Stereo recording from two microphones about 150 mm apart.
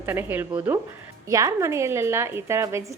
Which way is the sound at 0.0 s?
15° right (ahead or behind).